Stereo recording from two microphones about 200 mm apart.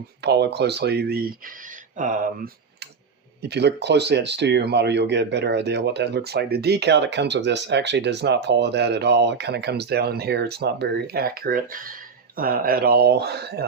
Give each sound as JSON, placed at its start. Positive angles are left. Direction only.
{"t": 0.2, "sound": "speech", "side_deg": -55}
{"t": 3.5, "sound": "speech", "side_deg": -60}